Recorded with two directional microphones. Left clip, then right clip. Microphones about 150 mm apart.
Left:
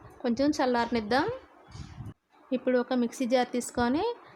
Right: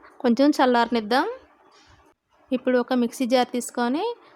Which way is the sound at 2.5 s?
20° right (ahead or behind).